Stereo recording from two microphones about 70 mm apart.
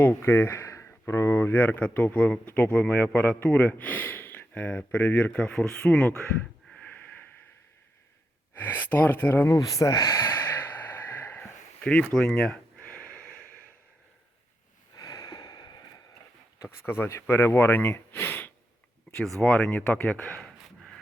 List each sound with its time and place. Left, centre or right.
0.0 s speech: left; by 6.2 s centre
6.7 s a sound: left
8.5 s speech: left
9.5 s speech: left
10.2 s snort: left
11.8 s speech: centre
12.8 s snort: centre
14.9 s a sound: left
16.6 s speech: left
17.1 s speech: left
19.4 s speech: centre
20.4 s a sound: centre